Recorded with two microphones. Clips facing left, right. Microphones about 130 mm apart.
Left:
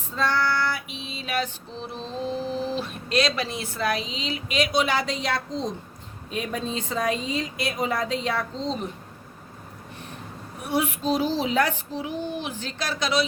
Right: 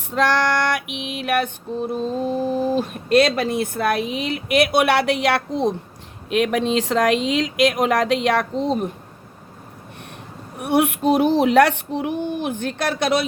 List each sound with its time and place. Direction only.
0.1 s female singing: 80° right; by 5.7 s 65° right (ahead or behind)
6.3 s speech: 80° right; by 8.9 s 55° right (ahead or behind)
10.6 s female singing: 60° right (ahead or behind)